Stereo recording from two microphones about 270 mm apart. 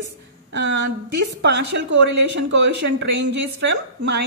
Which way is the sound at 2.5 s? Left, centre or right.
Right.